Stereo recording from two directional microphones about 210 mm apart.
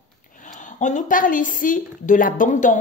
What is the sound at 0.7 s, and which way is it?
A woman's voice, 35° left (ahead or behind).